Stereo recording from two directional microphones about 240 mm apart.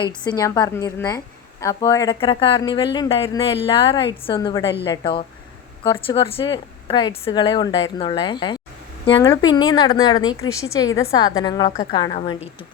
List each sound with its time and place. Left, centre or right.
0.3 s a woman's voice: centre